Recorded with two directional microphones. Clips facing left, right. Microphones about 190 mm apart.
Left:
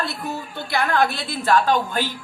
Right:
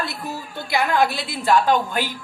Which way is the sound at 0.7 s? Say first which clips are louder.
Right 1 dB; 15° right (ahead or behind).